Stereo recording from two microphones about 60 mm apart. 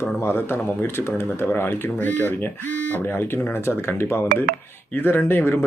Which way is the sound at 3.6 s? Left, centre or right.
Left.